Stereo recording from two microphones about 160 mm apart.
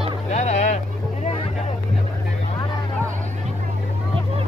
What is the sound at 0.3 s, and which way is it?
Boat, 45° left (ahead or behind).